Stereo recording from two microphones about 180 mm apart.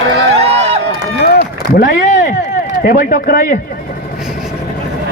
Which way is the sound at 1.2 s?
60° left (ahead or behind).